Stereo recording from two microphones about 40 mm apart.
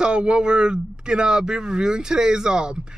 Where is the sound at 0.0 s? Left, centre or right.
Right.